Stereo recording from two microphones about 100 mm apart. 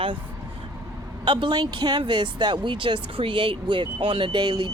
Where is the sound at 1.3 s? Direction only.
55° right (ahead or behind).